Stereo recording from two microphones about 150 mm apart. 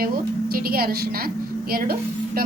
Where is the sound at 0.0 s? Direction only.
90° right.